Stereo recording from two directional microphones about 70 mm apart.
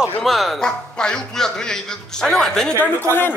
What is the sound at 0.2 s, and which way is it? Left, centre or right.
A man's voice, centre.